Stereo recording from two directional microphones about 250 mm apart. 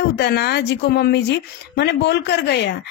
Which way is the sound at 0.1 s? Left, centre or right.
Left.